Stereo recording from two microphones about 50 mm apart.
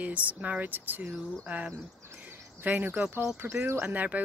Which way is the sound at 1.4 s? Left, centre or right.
Right.